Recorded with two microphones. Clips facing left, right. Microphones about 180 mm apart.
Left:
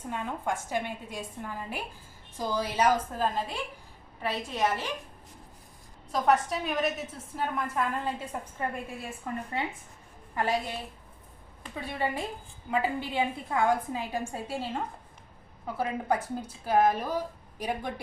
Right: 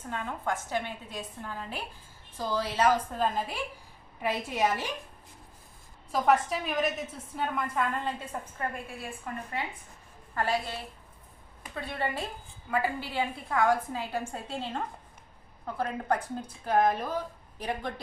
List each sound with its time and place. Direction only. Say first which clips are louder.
0.1 s a woman's voice: left 1 dB; 15° left (ahead or behind)
3.2 s a woman's voice: even; centre (ahead or behind)
4.2 s a woman's voice: right 1 dB; 15° right (ahead or behind)
6.1 s a woman's voice: even; centre (ahead or behind)
9.0 s a woman's voice: left 2 dB; 25° left (ahead or behind)